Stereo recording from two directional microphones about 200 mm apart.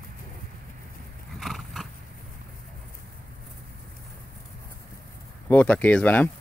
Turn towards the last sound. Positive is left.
turn(degrees=10)  # may be behind; listen again after turning